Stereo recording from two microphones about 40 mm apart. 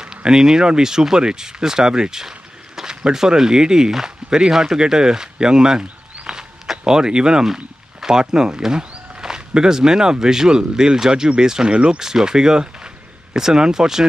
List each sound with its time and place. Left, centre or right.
0.0 s speech: centre
12.0 s speech: centre